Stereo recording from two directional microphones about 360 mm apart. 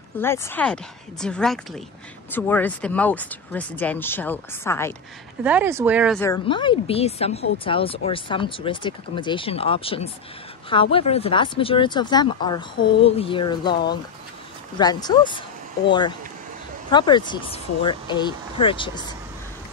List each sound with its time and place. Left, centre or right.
0.2 s speech: centre
5.4 s speech: centre